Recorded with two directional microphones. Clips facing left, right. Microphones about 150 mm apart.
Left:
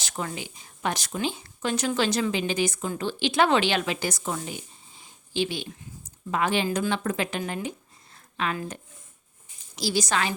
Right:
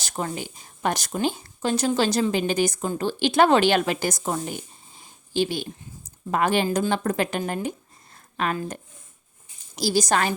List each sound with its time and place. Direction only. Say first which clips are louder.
0.0 s speech: right 3 dB; 40° right (ahead or behind)
6.7 s speech: right 3 dB; 35° right (ahead or behind)
8.1 s a sound: right 3 dB; 45° right (ahead or behind)
8.5 s speech: right 3 dB; 40° right (ahead or behind)